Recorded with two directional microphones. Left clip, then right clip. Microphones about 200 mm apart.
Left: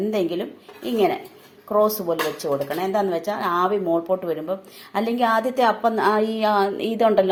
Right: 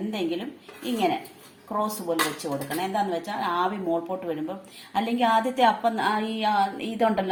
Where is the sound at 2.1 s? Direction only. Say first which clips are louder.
Left 4 dB; 45° left (ahead or behind).